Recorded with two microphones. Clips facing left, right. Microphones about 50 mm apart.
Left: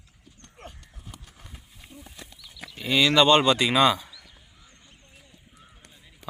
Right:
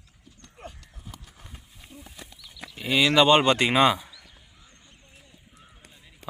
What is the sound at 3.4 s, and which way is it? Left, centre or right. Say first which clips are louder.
Speech: even; right.